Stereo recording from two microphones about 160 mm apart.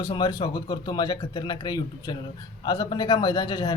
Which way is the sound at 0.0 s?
30° left (ahead or behind).